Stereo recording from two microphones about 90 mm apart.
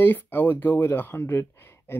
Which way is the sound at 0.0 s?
20° left (ahead or behind).